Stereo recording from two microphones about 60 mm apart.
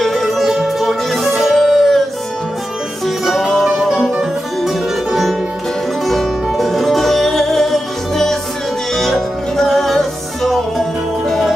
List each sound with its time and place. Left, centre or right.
0.0 s music: centre
3.3 s music: centre